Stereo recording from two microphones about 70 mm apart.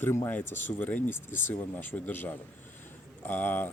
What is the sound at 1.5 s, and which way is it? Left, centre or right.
Speech, left.